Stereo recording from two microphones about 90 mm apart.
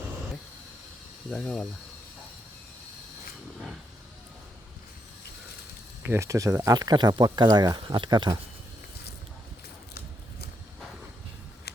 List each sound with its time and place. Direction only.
1.3 s speech: 5° left (ahead or behind)
6.0 s speech: 25° right (ahead or behind); by 8.4 s 55° right (ahead or behind)